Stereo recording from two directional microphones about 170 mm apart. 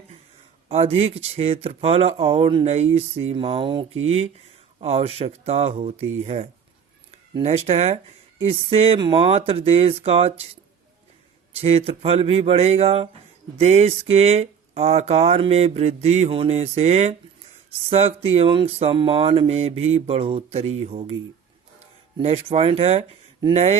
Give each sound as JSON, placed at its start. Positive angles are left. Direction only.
{"t": 0.7, "sound": "speech", "side_deg": -35}
{"t": 22.2, "sound": "speech", "side_deg": -35}